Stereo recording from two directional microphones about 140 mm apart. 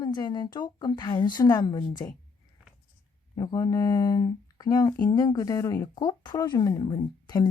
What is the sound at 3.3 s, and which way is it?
Speech, 30° left (ahead or behind).